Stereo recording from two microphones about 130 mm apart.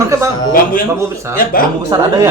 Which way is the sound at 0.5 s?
90° left.